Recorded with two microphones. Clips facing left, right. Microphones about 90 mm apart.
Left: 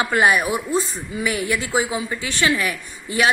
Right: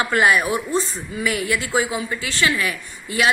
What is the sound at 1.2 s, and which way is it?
Speech, 20° left (ahead or behind).